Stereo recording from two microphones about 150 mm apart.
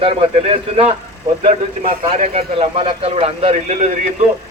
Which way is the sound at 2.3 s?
40° right (ahead or behind).